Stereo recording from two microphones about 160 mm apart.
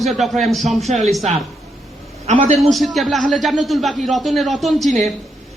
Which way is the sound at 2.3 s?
45° right (ahead or behind).